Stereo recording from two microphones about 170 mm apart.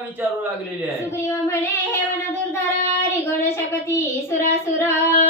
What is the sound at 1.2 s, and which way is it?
Child singing, 15° left (ahead or behind).